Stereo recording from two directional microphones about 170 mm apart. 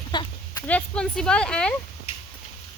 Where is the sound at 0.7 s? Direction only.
5° left (ahead or behind).